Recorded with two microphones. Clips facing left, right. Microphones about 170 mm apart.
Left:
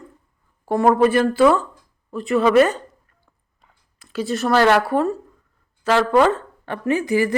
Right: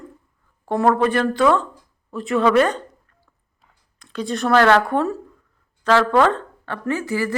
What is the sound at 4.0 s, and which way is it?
A woman's voice, 5° left (ahead or behind).